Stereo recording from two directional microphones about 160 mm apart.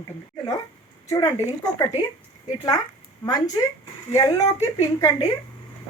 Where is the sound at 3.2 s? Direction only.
20° left (ahead or behind).